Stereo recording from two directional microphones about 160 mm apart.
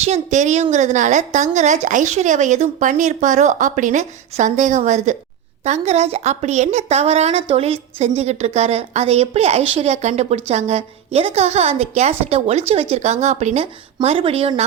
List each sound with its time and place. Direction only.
0.0 s a woman's voice: 45° right (ahead or behind)